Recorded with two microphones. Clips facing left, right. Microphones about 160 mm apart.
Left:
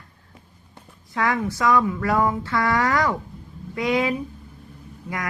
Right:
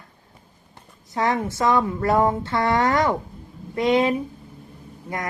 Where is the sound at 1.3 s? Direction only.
25° right (ahead or behind).